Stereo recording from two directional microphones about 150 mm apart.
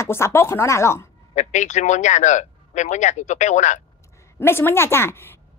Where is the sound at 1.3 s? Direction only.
50° left (ahead or behind).